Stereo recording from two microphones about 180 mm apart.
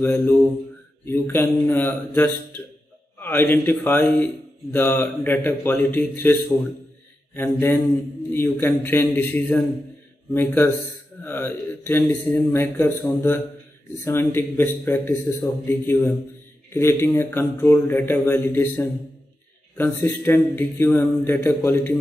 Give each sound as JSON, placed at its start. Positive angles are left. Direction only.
{"t": 0.0, "sound": "a man's voice", "side_deg": 15}